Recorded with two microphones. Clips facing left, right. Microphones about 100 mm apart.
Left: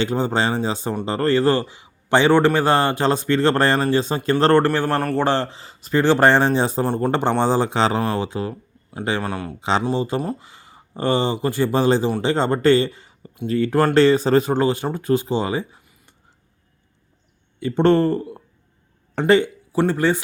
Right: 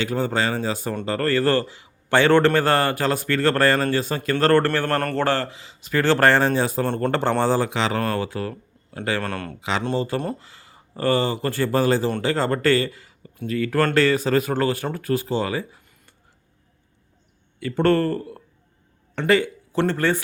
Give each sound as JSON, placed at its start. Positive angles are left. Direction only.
{"t": 0.0, "sound": "a man's voice", "side_deg": 25}
{"t": 5.5, "sound": "speech", "side_deg": 40}
{"t": 5.9, "sound": "a man's voice", "side_deg": 20}
{"t": 6.8, "sound": "speech", "side_deg": 15}
{"t": 7.7, "sound": "speech", "side_deg": 30}
{"t": 8.1, "sound": "a man's voice", "side_deg": 20}
{"t": 9.6, "sound": "speech", "side_deg": 30}
{"t": 9.8, "sound": "a man's voice", "side_deg": 15}
{"t": 17.6, "sound": "a man's voice", "side_deg": 20}
{"t": 19.7, "sound": "speech", "side_deg": 10}